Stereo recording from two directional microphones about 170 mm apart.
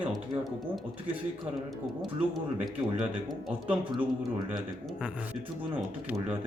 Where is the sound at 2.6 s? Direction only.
Centre (ahead or behind).